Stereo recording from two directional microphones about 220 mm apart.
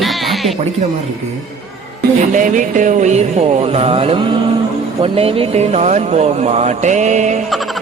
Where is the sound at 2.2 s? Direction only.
35° right (ahead or behind).